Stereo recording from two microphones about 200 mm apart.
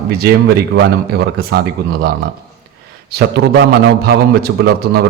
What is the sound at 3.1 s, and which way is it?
A man's voice, 50° right (ahead or behind).